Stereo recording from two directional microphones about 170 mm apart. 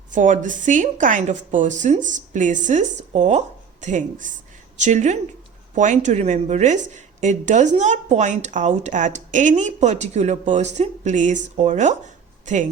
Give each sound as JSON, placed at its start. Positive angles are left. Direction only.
{"t": 0.1, "sound": "a woman's voice", "side_deg": -50}